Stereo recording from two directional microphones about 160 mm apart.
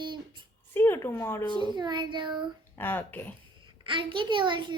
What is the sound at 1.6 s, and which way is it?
Child singing, 25° right (ahead or behind).